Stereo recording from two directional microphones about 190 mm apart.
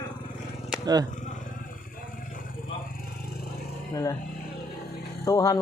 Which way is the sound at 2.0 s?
45° left (ahead or behind).